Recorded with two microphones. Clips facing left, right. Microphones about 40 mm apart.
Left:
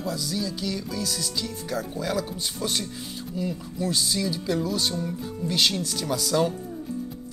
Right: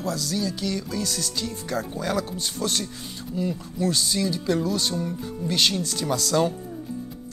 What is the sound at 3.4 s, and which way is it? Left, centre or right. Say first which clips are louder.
Speech: right 3 dB; centre.